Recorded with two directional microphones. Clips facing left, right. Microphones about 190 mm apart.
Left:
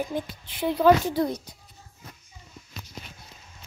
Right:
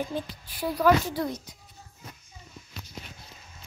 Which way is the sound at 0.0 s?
20° left (ahead or behind).